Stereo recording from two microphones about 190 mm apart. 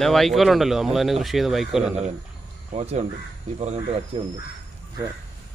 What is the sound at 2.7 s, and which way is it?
Speech, 35° right (ahead or behind).